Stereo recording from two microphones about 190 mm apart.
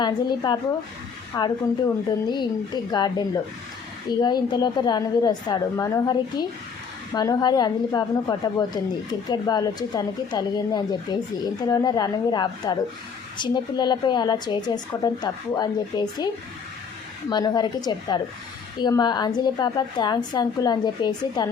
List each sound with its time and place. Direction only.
0.0 s a woman's voice: 20° left (ahead or behind)